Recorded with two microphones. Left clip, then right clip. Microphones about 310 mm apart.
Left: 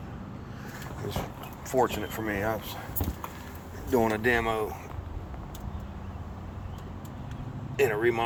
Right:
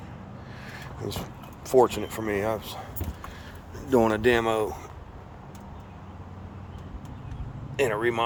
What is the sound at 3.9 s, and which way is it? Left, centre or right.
Speech, right.